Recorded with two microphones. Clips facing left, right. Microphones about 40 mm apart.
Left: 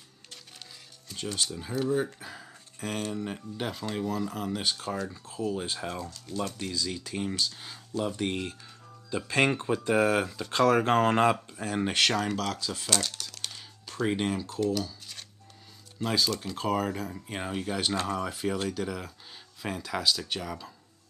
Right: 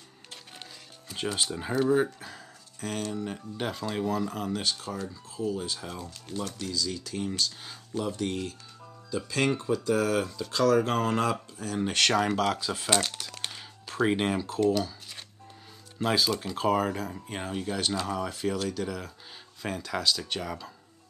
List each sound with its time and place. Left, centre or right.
1.1 s speech: centre
2.1 s a sound: centre
3.1 s speech: centre
3.5 s speech: centre
4.9 s speech: left; by 7.8 s centre
8.2 s speech: left
11.9 s speech: centre
12.2 s speech: centre
12.9 s crumpling: right; by 14.8 s centre
14.8 s shuffling cards: centre
16.0 s speech: centre
17.5 s speech: centre